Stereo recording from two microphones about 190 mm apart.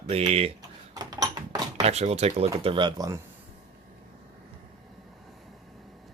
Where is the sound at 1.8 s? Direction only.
35° right (ahead or behind).